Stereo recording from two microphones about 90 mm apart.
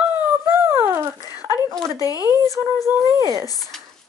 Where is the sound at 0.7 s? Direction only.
30° right (ahead or behind).